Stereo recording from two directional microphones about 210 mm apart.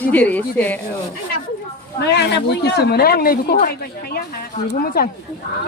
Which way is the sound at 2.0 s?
55° left (ahead or behind).